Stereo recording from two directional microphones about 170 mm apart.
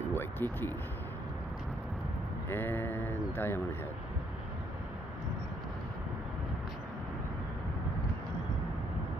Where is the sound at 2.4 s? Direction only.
15° left (ahead or behind).